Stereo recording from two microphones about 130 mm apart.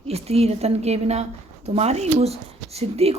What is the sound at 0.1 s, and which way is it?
A woman's voice, 50° right (ahead or behind).